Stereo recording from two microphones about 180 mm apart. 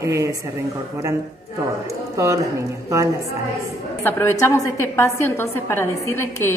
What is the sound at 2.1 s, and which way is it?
Speech, 20° right (ahead or behind).